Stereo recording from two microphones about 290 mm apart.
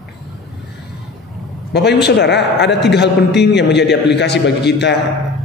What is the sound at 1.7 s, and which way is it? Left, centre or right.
A man's voice, left.